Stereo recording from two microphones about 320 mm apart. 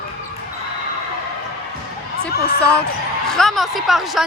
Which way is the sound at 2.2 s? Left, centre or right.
Left.